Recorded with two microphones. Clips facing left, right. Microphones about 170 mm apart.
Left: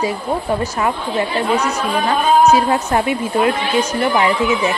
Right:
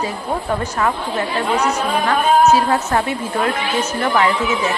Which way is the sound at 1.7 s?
15° left (ahead or behind).